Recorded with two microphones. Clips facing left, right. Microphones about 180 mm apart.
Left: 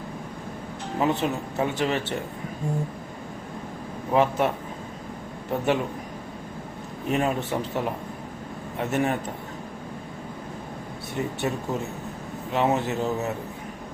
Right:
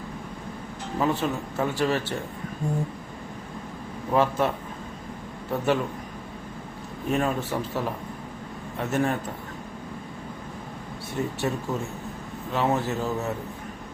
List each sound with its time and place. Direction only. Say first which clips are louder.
0.9 s a man's voice: left 1 dB; 20° left (ahead or behind)
4.1 s a man's voice: left 1 dB; 20° left (ahead or behind)
7.1 s a man's voice: left 1 dB; 20° left (ahead or behind)
11.4 s a man's voice: even; 20° left (ahead or behind)